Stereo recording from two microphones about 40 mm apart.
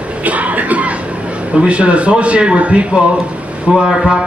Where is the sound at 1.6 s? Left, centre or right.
Right.